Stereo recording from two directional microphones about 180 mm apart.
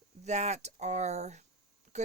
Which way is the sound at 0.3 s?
40° right (ahead or behind).